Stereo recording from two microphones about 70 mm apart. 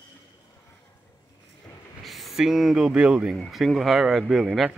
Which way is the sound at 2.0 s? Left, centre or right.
Centre.